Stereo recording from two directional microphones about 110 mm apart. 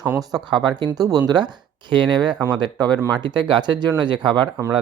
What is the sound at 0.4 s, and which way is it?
Speech, 45° right (ahead or behind).